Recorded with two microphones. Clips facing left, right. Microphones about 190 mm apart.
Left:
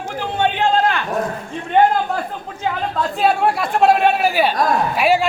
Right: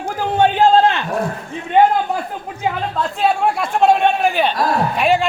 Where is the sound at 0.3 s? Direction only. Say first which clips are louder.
Right 5 dB; 40° right (ahead or behind).